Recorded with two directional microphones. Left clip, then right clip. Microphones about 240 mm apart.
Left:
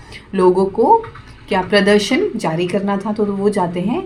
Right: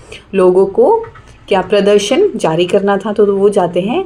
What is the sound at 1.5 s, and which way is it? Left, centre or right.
A woman's voice, right.